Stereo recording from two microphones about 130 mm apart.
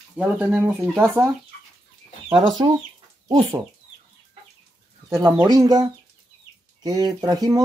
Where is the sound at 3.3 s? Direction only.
35° right (ahead or behind).